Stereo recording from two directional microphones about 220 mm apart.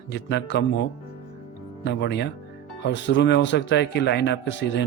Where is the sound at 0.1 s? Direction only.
50° left (ahead or behind).